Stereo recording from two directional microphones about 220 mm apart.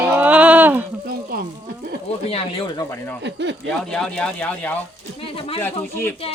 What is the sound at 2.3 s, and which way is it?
Speech, 25° left (ahead or behind).